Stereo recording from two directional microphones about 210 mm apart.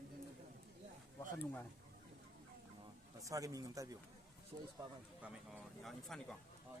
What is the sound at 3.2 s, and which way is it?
Speech, 15° right (ahead or behind).